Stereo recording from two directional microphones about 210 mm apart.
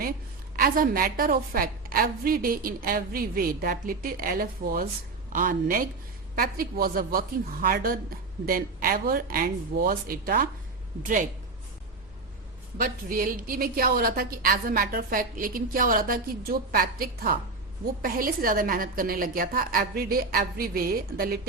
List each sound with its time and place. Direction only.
0.5 s a woman's voice: 45° right (ahead or behind)
12.7 s a woman's voice: 40° right (ahead or behind)